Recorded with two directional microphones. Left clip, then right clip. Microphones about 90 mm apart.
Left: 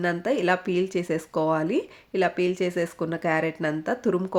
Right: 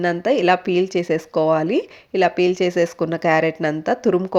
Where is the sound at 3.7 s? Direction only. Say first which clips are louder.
Right 7 dB; 35° right (ahead or behind).